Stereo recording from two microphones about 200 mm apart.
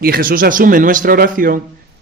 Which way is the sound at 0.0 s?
45° right (ahead or behind).